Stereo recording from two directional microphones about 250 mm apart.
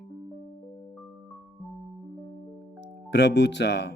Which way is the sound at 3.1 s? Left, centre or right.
Left.